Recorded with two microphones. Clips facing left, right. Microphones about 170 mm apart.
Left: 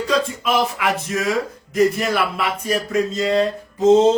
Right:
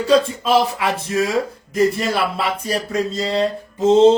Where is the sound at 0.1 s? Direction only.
30° right (ahead or behind).